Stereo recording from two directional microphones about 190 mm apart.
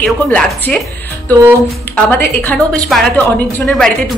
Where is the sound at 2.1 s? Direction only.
10° left (ahead or behind).